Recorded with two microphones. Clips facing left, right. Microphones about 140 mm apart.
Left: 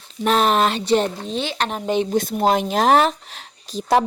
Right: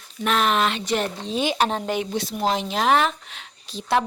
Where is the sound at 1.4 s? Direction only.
10° right (ahead or behind).